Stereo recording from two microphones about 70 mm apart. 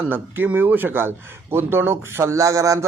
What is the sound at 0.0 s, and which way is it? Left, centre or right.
A man's voice, right.